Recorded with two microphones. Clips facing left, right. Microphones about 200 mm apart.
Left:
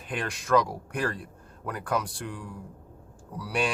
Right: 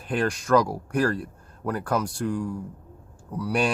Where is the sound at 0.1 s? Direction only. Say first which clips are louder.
Right 4 dB; 45° right (ahead or behind).